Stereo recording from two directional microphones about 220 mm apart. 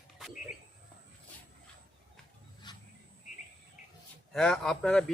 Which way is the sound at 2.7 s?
20° left (ahead or behind).